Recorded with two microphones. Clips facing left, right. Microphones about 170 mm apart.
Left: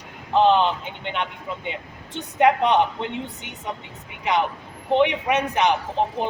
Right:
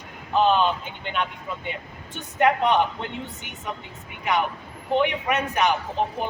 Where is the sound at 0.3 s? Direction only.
20° left (ahead or behind).